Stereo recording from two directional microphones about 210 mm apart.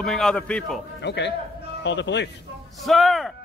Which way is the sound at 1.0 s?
55° left (ahead or behind).